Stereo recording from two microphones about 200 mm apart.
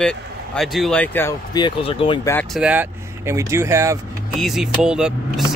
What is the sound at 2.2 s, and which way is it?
Speech, 10° left (ahead or behind).